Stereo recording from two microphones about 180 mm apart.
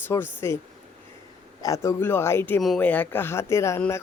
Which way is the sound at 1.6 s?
20° left (ahead or behind).